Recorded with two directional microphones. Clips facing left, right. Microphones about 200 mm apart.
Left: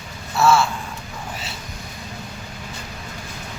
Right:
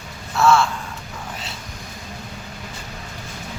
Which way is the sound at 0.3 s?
5° left (ahead or behind).